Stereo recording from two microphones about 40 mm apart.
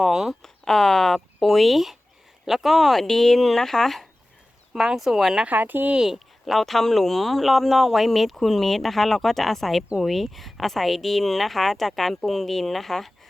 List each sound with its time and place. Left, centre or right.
0.1 s speech: centre
0.4 s speech: centre
4.7 s speech: centre
5.5 s speech: right
6.1 s speech: centre